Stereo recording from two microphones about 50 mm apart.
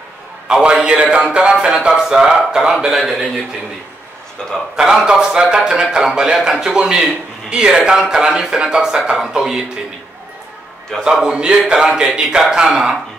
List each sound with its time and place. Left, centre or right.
0.5 s a sound: centre
1.1 s a man's voice: centre
4.4 s a man's voice: centre
4.7 s speech: centre
11.0 s speech: centre